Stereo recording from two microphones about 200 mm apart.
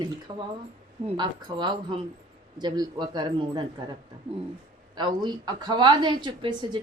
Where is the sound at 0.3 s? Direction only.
25° right (ahead or behind).